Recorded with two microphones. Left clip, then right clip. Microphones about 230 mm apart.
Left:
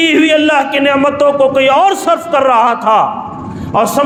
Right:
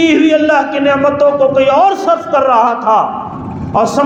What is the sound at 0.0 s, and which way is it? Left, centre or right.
A man's voice, left.